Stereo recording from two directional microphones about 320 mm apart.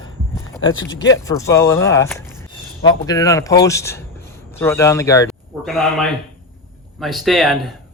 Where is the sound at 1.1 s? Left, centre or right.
Centre.